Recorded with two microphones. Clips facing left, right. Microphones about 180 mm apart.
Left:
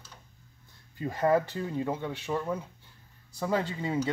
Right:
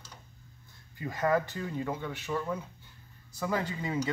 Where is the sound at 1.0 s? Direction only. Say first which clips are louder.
Left 3 dB; 30° left (ahead or behind).